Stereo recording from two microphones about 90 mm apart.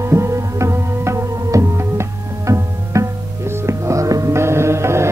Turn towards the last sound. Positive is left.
turn(degrees=-30)  # may be behind; listen again after turning